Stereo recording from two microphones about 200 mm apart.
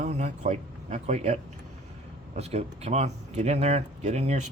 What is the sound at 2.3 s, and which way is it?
Speech, 30° right (ahead or behind).